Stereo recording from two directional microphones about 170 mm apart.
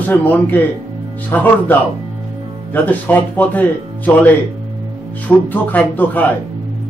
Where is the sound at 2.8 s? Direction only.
10° left (ahead or behind).